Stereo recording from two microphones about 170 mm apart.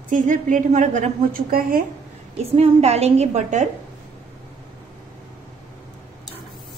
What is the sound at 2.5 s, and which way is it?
A woman's voice, 40° right (ahead or behind).